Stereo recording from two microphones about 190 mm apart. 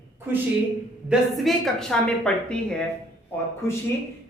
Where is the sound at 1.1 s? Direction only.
Centre (ahead or behind).